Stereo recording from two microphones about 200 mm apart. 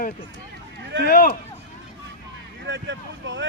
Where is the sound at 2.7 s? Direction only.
60° right (ahead or behind).